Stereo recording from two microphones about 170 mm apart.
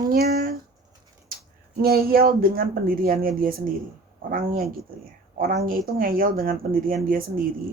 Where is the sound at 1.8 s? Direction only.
60° right (ahead or behind).